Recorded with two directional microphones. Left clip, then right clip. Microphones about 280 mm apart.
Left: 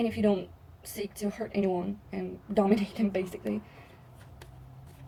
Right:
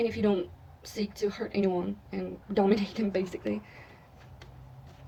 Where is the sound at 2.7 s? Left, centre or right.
Centre.